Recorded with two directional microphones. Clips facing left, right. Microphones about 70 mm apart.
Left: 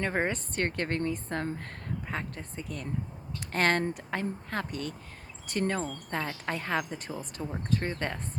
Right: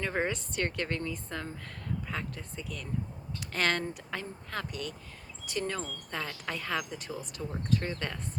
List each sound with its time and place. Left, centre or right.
0.0 s a woman's voice: left